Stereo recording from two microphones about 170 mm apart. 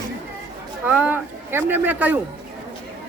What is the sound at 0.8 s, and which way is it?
Speech, 10° right (ahead or behind).